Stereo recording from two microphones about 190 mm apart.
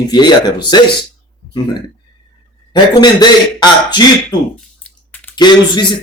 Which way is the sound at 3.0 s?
20° left (ahead or behind).